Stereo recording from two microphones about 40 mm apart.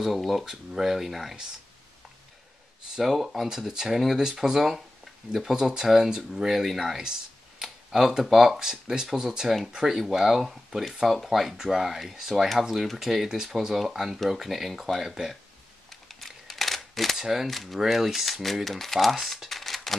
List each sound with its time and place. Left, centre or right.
0.0 s speech: centre
3.0 s speech: centre
3.4 s speech: centre
8.2 s speech: centre
8.5 s speech: centre
15.9 s camera: centre
17.2 s speech: centre
17.5 s speech: centre